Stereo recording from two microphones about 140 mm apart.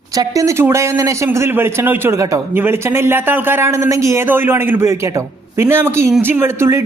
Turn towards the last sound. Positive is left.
turn(degrees=-20)  # may be behind; listen again after turning